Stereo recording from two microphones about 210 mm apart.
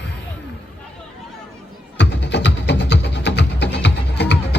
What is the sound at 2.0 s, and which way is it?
Music, 55° left (ahead or behind).